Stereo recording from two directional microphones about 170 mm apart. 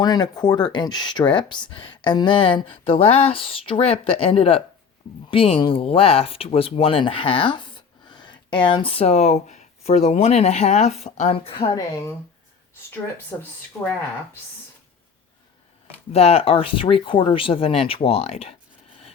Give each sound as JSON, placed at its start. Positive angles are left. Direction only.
{"t": 0.0, "sound": "speech", "side_deg": 25}
{"t": 13.3, "sound": "speech", "side_deg": 15}
{"t": 16.1, "sound": "speech", "side_deg": 35}